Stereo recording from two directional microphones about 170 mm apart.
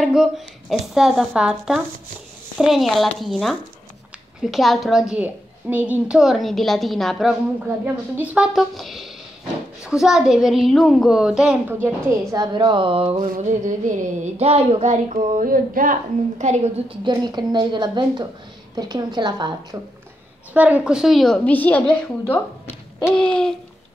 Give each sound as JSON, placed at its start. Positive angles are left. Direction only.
{"t": 0.0, "sound": "a woman's voice", "side_deg": 0}
{"t": 12.4, "sound": "a woman's voice", "side_deg": -25}
{"t": 13.3, "sound": "a sound", "side_deg": -45}
{"t": 17.0, "sound": "a woman's voice", "side_deg": -25}
{"t": 20.5, "sound": "a woman's voice", "side_deg": -10}